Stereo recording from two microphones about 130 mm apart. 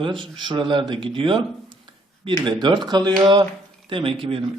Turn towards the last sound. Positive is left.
turn(degrees=-45)  # may be behind; listen again after turning